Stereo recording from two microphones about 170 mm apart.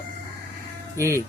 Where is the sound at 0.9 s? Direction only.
15° right (ahead or behind).